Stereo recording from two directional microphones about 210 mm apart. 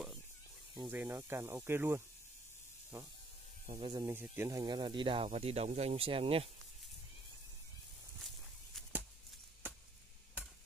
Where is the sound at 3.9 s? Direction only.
15° right (ahead or behind).